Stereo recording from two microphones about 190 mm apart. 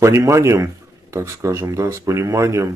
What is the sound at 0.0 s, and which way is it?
Speech, 15° right (ahead or behind).